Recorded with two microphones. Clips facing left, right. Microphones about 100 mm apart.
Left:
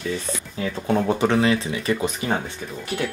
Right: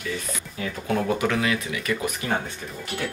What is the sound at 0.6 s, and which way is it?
Speech, 30° left (ahead or behind).